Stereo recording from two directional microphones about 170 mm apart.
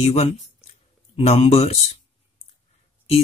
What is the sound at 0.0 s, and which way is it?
Speech, 40° left (ahead or behind).